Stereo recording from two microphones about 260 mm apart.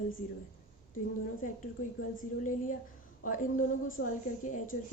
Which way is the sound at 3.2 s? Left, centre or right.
Left.